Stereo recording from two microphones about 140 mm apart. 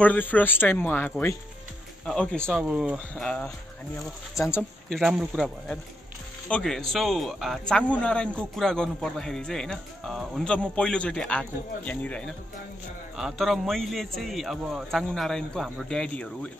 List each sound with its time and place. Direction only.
0.0 s speech: 10° left (ahead or behind)
2.6 s speech: 10° right (ahead or behind)
3.2 s speech: 5° left (ahead or behind)
4.4 s speech: 25° left (ahead or behind)
4.8 s speech: centre (ahead or behind)